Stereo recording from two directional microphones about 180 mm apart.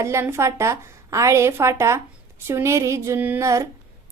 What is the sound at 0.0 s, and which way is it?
A woman's voice, 15° right (ahead or behind).